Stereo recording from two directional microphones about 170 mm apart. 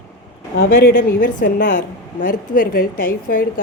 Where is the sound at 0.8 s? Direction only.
60° left (ahead or behind).